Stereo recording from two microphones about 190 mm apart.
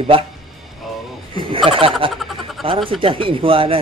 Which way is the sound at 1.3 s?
30° right (ahead or behind).